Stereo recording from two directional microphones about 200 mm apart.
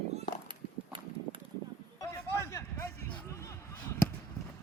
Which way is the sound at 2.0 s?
15° left (ahead or behind).